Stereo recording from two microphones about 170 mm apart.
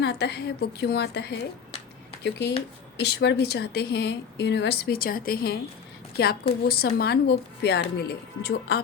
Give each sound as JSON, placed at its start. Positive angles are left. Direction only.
{"t": 0.0, "sound": "a woman's voice", "side_deg": 75}
{"t": 3.0, "sound": "a woman's voice", "side_deg": 85}